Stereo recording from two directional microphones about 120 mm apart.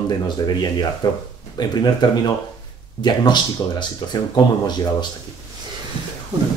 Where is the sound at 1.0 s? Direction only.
35° left (ahead or behind).